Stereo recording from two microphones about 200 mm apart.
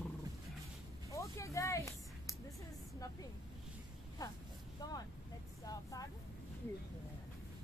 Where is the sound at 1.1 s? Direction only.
15° left (ahead or behind).